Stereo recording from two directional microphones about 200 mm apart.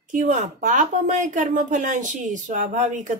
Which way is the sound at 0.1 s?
40° right (ahead or behind).